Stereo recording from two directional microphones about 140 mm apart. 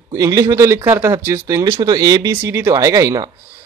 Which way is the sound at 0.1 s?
25° right (ahead or behind).